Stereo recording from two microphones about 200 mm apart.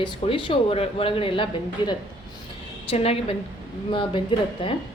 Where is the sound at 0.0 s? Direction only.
25° left (ahead or behind).